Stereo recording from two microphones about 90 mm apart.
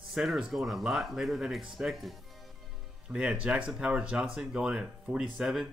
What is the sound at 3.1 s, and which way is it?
Speech, 10° right (ahead or behind).